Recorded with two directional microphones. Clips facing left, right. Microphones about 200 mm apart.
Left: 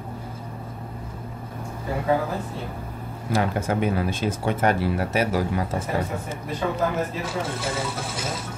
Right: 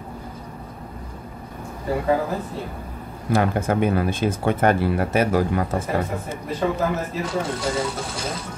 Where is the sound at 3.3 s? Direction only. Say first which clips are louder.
Right 3 dB; 55° right (ahead or behind).